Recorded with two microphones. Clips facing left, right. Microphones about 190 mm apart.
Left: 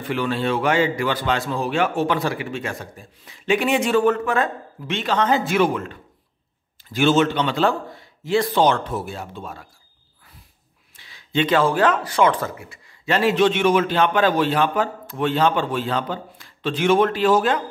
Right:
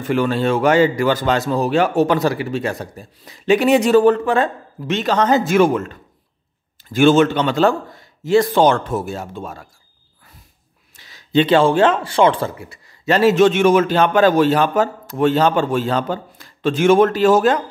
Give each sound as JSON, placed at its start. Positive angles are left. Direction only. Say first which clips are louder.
{"t": 0.0, "sound": "a man's voice", "louder": "right 5 dB", "side_deg": -45}
{"t": 11.0, "sound": "speech", "louder": "right 6 dB", "side_deg": -40}